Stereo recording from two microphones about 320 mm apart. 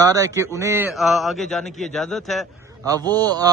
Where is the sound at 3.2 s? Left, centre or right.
Centre.